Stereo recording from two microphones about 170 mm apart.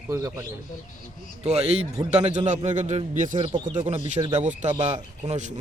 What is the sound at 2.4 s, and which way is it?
Speech, 45° right (ahead or behind).